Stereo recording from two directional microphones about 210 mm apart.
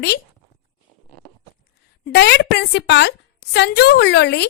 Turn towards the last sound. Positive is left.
turn(degrees=55)  # may be behind; listen again after turning